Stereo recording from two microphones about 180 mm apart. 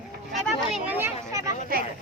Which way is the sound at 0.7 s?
10° right (ahead or behind).